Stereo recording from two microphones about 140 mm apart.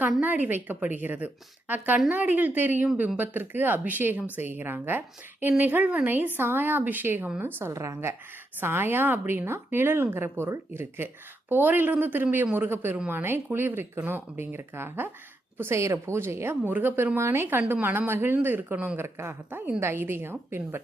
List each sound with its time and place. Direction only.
0.2 s a woman's voice: 10° right (ahead or behind)